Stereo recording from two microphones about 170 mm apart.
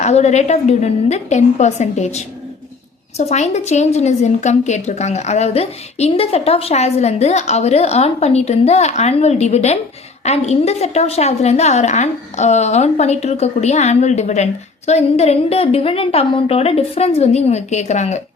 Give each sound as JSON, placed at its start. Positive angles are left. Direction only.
{"t": 0.0, "sound": "a woman's voice", "side_deg": 40}